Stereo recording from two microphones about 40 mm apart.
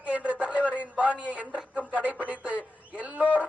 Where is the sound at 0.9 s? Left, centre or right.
Right.